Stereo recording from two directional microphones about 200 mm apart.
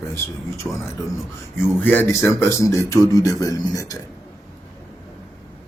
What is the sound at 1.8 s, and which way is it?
A man's voice, 10° left (ahead or behind).